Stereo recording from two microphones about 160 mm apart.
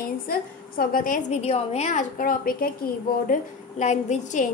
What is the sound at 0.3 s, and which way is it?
A woman's voice, 65° left (ahead or behind).